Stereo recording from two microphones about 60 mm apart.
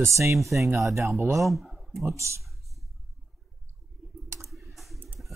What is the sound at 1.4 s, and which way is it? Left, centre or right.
Speech, centre.